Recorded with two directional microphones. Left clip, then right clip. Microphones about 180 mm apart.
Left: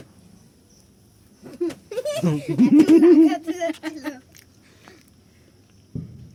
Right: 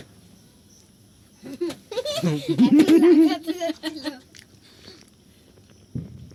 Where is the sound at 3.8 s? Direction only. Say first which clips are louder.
Even; 10° right (ahead or behind).